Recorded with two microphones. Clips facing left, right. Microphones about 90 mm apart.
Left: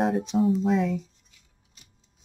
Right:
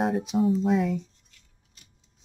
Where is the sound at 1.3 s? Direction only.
10° left (ahead or behind).